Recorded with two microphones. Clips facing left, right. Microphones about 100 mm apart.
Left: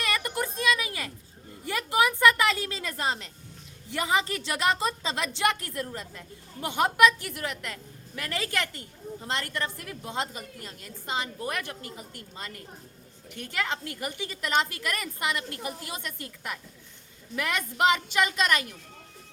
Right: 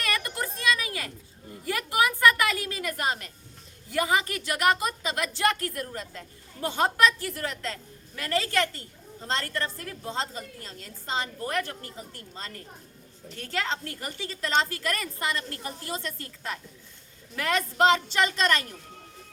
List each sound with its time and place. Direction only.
0.0 s a sound: 20° left (ahead or behind)
1.6 s a woman's voice: 20° left (ahead or behind)
18.1 s a woman's voice: 10° left (ahead or behind)